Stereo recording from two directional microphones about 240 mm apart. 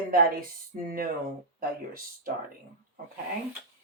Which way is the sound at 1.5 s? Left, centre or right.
Right.